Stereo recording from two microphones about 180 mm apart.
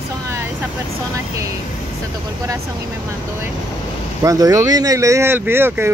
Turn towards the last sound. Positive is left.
turn(degrees=-10)  # may be behind; listen again after turning